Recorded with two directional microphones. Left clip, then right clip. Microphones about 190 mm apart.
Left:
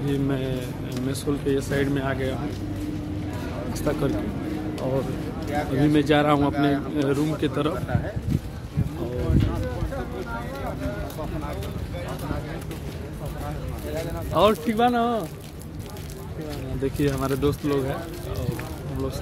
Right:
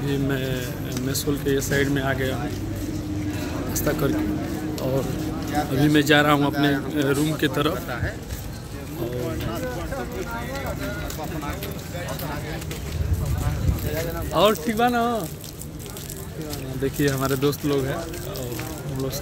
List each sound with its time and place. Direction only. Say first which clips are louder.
0.1 s speech: right 1 dB; centre (ahead or behind)
3.7 s speech: right 1 dB; centre (ahead or behind)
5.8 s speech: right 2 dB; 5° left (ahead or behind)
6.5 s speech: right 1 dB; 40° left (ahead or behind)
7.0 s speech: right 3 dB; centre (ahead or behind)
14.3 s speech: even; 5° left (ahead or behind)
16.8 s speech: right 2 dB; 5° right (ahead or behind)